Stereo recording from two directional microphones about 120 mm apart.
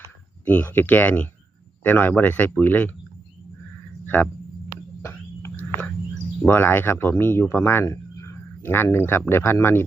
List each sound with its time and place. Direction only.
0.4 s speech: 15° left (ahead or behind)
4.0 s a sound: 15° left (ahead or behind)
6.5 s speech: 20° left (ahead or behind)